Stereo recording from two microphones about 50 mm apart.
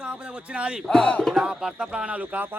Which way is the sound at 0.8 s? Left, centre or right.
Centre.